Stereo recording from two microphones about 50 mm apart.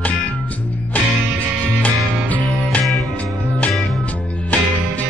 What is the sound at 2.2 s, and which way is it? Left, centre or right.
Music, left.